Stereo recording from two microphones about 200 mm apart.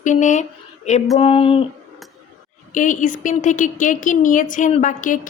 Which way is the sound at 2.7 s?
40° left (ahead or behind).